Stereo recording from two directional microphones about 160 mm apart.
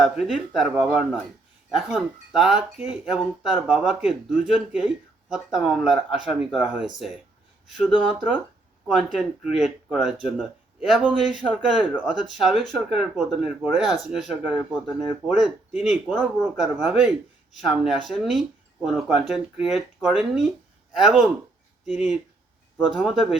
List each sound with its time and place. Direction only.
0.0 s speech: centre (ahead or behind)